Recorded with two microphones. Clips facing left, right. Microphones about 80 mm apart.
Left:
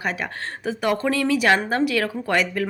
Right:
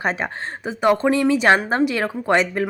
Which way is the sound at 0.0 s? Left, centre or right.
Right.